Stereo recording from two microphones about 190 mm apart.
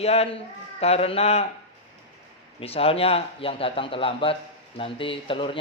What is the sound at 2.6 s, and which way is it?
Speech, 30° left (ahead or behind).